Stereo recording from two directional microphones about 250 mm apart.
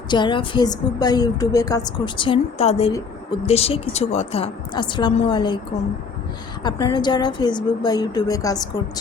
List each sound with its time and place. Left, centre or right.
0.1 s a woman's voice: centre
6.6 s a woman's voice: centre